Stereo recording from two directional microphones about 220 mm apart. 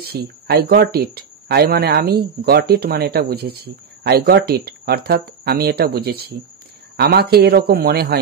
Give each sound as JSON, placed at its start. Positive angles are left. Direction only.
{"t": 0.0, "sound": "speech", "side_deg": -45}